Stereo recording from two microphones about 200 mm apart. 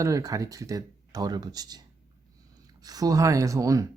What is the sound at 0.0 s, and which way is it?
Speech, 15° right (ahead or behind).